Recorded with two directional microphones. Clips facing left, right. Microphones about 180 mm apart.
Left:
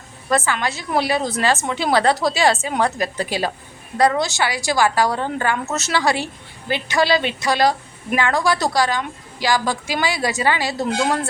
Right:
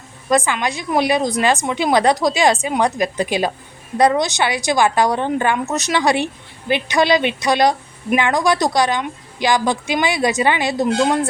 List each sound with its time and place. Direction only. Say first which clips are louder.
0.3 s a woman's voice: right 3 dB; 15° right (ahead or behind)